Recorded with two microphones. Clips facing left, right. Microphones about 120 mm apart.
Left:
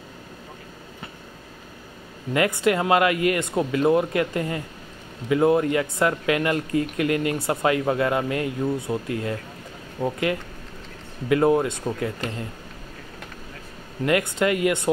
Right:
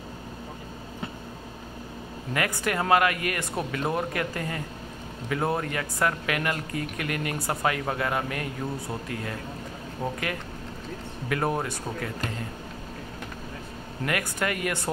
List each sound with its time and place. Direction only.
2.3 s speech: 20° left (ahead or behind)
11.2 s speech: 20° left (ahead or behind)
14.0 s speech: 25° left (ahead or behind)